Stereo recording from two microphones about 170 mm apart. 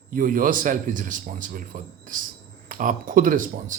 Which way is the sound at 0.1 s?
50° right (ahead or behind).